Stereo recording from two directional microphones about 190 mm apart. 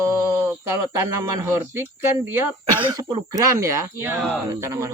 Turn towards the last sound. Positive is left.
turn(degrees=-15)  # may be behind; listen again after turning